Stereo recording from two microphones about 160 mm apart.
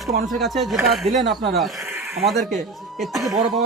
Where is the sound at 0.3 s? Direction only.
Centre (ahead or behind).